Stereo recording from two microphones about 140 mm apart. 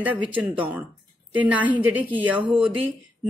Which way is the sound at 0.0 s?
10° right (ahead or behind).